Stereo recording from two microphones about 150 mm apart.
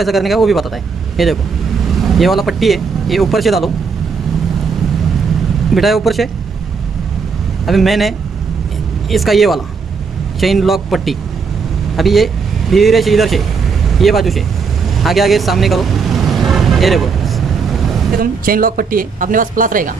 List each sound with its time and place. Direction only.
0.0 s speech: centre (ahead or behind)
5.8 s speech: centre (ahead or behind)
7.6 s speech: centre (ahead or behind)
9.1 s speech: centre (ahead or behind)
15.0 s vehicle: centre (ahead or behind)
18.2 s speech: 75° right (ahead or behind)